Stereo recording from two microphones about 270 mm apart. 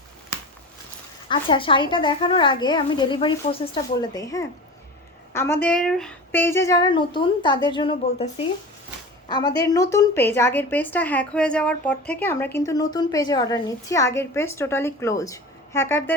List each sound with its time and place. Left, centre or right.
1.3 s a woman's voice: centre